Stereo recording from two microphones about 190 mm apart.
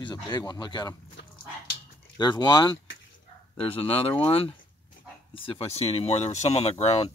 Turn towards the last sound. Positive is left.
turn(degrees=30)  # may be behind; listen again after turning